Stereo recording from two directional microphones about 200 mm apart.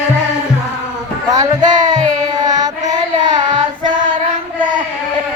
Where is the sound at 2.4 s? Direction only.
20° right (ahead or behind).